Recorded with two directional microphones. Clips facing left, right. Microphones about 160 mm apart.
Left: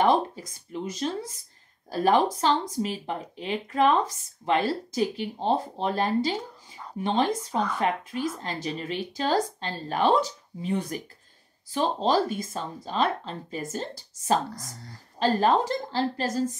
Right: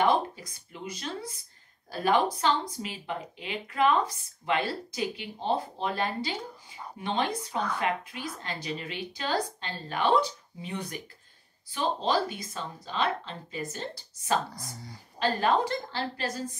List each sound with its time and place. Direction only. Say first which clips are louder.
0.0 s a sound: left 3 dB; 40° left (ahead or behind)
1.9 s speech: left 4 dB; 40° left (ahead or behind)
7.5 s a woman's voice: left 3 dB; centre (ahead or behind)
8.6 s speech: left 5 dB; 35° left (ahead or behind)
14.6 s a woman's voice: even; 5° right (ahead or behind)
15.1 s speech: left 4 dB; 35° left (ahead or behind)